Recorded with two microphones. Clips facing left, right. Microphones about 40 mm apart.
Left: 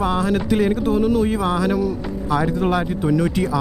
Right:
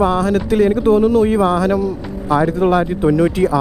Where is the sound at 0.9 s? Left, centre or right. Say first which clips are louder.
Right 6 dB; centre.